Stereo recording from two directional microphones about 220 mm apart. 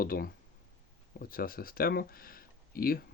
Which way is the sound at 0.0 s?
40° left (ahead or behind).